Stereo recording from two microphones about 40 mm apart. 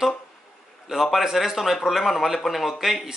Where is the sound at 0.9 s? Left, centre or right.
Centre.